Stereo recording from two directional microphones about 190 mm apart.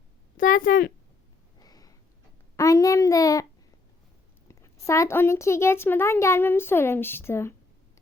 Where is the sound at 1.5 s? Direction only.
20° left (ahead or behind).